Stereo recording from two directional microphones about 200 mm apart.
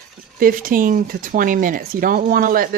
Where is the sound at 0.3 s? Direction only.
45° right (ahead or behind).